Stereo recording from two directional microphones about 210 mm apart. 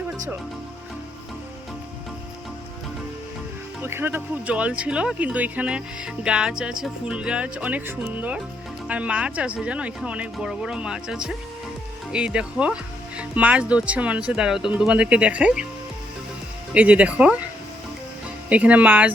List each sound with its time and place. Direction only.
3.8 s speech: 10° right (ahead or behind)
16.7 s speech: 5° right (ahead or behind)
18.4 s speech: 5° right (ahead or behind)